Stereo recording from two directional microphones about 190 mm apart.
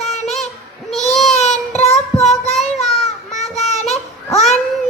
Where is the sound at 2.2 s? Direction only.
Centre (ahead or behind).